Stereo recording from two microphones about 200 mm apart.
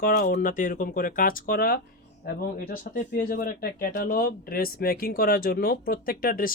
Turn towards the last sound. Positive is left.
turn(degrees=45)  # may be behind; listen again after turning